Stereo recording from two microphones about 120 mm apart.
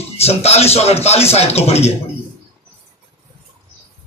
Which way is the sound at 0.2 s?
60° left (ahead or behind).